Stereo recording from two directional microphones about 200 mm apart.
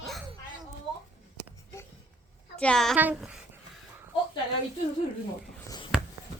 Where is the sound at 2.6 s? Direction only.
5° left (ahead or behind).